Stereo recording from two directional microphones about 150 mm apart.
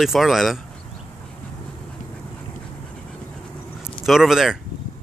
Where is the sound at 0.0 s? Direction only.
Centre (ahead or behind).